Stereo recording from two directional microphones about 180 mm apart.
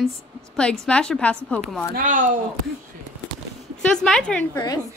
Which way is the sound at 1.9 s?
50° right (ahead or behind).